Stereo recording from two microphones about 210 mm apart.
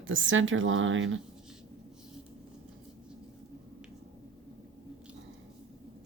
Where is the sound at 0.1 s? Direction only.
65° right (ahead or behind).